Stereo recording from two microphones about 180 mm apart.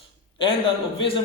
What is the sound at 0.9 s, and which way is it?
Speech, 30° left (ahead or behind).